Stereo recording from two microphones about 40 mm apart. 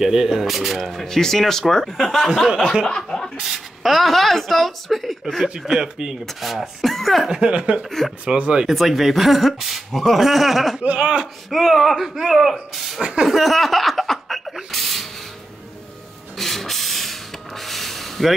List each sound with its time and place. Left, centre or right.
0.0 s speech: centre
2.9 s speech: centre
3.3 s speech: centre
5.6 s speech: centre
6.2 s speech: centre
7.2 s speech: right
8.6 s speech: centre
10.8 s speech: right
11.5 s speech: centre
13.0 s speech: right
13.3 s laughter: centre
16.3 s a sound: centre